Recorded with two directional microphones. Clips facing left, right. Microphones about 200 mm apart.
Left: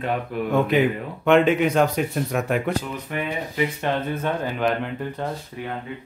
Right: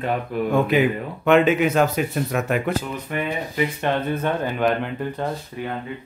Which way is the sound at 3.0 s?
50° right (ahead or behind).